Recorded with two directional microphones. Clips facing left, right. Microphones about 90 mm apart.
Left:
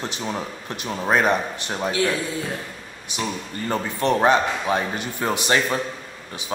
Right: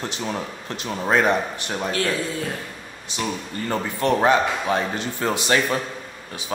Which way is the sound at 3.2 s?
20° left (ahead or behind).